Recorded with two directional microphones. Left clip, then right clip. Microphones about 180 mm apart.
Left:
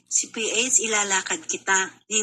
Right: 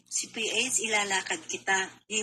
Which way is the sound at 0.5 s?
40° left (ahead or behind).